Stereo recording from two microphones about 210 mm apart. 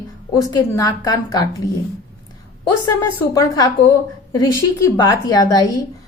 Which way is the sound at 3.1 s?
15° left (ahead or behind).